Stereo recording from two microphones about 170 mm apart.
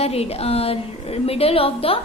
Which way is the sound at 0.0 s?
35° left (ahead or behind).